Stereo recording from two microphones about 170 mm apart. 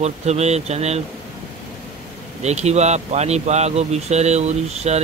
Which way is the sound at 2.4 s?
40° right (ahead or behind).